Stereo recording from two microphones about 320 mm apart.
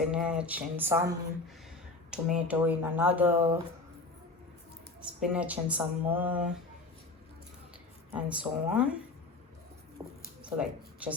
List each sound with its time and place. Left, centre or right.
0.0 s speech: centre
2.0 s speech: centre
5.2 s speech: centre
8.1 s speech: centre
10.0 s speech: centre